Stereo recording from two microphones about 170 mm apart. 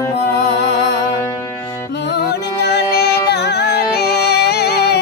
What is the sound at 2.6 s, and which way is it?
Music, 75° left (ahead or behind).